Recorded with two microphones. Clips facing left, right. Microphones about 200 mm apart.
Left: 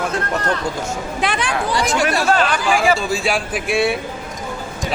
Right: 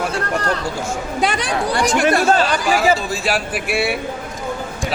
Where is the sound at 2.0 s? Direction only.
55° right (ahead or behind).